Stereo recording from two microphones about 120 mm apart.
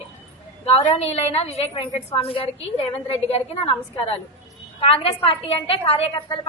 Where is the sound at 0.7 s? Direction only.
60° left (ahead or behind).